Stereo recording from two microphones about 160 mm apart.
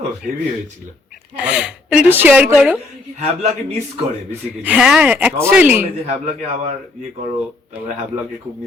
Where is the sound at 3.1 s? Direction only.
45° right (ahead or behind).